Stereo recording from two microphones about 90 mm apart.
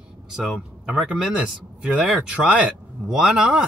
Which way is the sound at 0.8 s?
10° right (ahead or behind).